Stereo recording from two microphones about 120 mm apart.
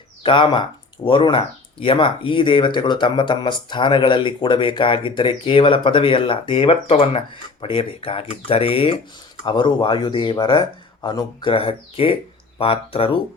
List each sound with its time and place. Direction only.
0.2 s speech: 45° left (ahead or behind)
9.4 s speech: 40° left (ahead or behind)
11.5 s speech: 50° left (ahead or behind)